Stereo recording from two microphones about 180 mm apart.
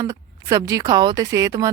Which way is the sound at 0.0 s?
20° right (ahead or behind).